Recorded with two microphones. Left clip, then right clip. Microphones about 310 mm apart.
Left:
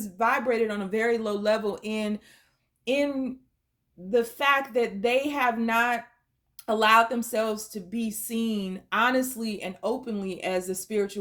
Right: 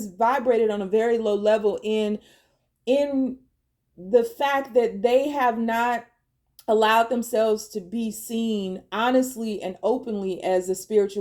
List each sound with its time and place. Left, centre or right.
0.0 s a woman's voice: left
1.5 s speech: left
1.9 s a woman's voice: left
4.1 s a woman's voice: left